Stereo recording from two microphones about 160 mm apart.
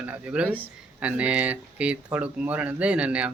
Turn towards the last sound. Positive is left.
turn(degrees=-10)  # may be behind; listen again after turning